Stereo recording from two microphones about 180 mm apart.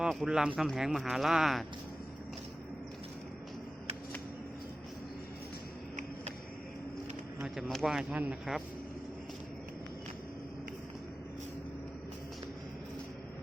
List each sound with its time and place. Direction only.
0.0 s speech: 5° right (ahead or behind)
7.3 s speech: 5° right (ahead or behind)